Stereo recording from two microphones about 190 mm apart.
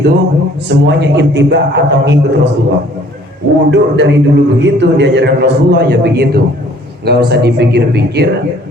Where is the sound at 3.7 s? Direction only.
70° right (ahead or behind).